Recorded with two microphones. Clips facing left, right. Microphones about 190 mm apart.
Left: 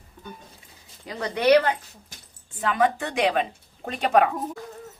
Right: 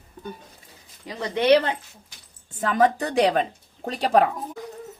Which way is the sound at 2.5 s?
40° right (ahead or behind).